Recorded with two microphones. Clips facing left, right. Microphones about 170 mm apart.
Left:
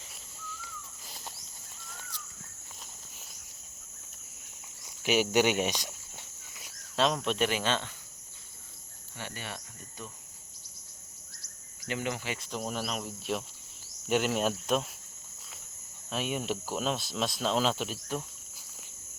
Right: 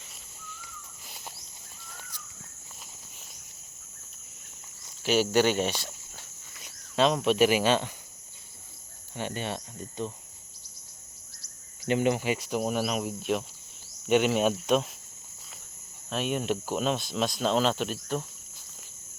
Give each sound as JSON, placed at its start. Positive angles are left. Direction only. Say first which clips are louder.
{"t": 5.0, "sound": "speech", "louder": "right 2 dB", "side_deg": 15}
{"t": 5.8, "sound": "walk", "louder": "right 1 dB", "side_deg": 10}
{"t": 6.9, "sound": "speech", "louder": "right 5 dB", "side_deg": 0}
{"t": 9.1, "sound": "speech", "louder": "right 8 dB", "side_deg": -20}
{"t": 11.9, "sound": "speech", "louder": "right 9 dB", "side_deg": -20}
{"t": 16.0, "sound": "speech", "louder": "right 4 dB", "side_deg": 5}